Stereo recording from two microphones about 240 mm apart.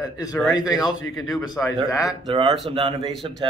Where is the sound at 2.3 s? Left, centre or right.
Centre.